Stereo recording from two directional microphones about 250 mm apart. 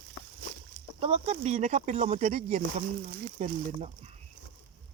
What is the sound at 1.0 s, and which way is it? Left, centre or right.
Speech, right.